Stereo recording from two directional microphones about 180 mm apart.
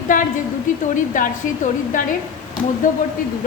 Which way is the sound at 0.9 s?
45° left (ahead or behind).